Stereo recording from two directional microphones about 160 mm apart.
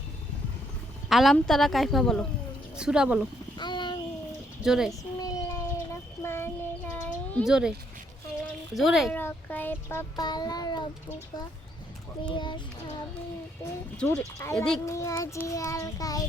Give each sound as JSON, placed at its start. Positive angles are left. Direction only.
{"t": 1.1, "sound": "a woman's voice", "side_deg": 0}
{"t": 3.6, "sound": "a sound", "side_deg": 30}
{"t": 4.6, "sound": "a woman's voice", "side_deg": -5}
{"t": 4.9, "sound": "child singing", "side_deg": 20}
{"t": 7.4, "sound": "a woman's voice", "side_deg": -5}
{"t": 8.7, "sound": "a woman's voice", "side_deg": 0}
{"t": 9.1, "sound": "child singing", "side_deg": 10}
{"t": 10.2, "sound": "child singing", "side_deg": 25}
{"t": 13.9, "sound": "a woman's voice", "side_deg": 5}
{"t": 14.8, "sound": "child singing", "side_deg": 20}